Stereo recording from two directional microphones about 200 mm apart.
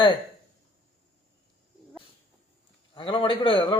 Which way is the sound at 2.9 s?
25° left (ahead or behind).